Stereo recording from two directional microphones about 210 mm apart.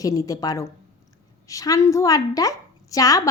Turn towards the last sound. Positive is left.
turn(degrees=15)  # may be behind; listen again after turning